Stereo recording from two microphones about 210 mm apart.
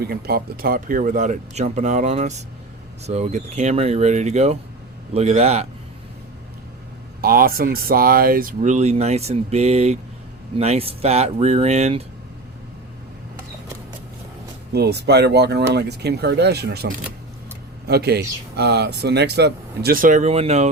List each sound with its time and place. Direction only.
0.0 s speech: 45° right (ahead or behind); by 5.6 s 30° right (ahead or behind)
7.2 s speech: 45° right (ahead or behind)
14.7 s speech: 50° right (ahead or behind); by 20.7 s 30° right (ahead or behind)